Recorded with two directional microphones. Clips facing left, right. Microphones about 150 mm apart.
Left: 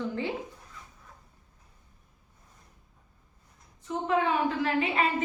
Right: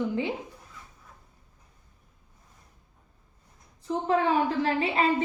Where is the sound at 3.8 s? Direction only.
35° right (ahead or behind).